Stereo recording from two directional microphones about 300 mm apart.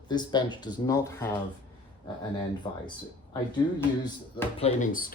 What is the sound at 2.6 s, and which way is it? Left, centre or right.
Speech, centre.